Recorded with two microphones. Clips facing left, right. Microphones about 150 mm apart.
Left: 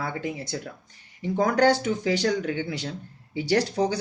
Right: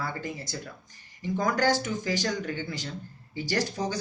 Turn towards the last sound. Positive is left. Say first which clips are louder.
# left 6 dB
turn(degrees=65)  # may be behind; listen again after turning